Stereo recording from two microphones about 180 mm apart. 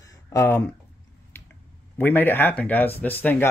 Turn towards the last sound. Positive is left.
turn(degrees=10)  # may be behind; listen again after turning